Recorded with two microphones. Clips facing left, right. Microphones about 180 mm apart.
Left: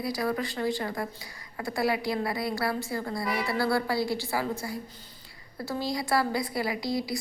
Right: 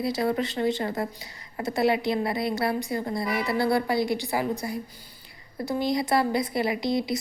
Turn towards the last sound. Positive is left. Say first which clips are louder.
# right 4 dB
turn(degrees=-20)  # may be behind; listen again after turning